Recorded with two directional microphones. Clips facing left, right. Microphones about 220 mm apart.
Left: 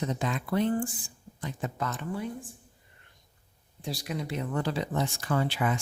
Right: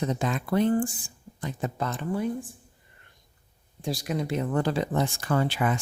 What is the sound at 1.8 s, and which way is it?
Speech, 30° right (ahead or behind).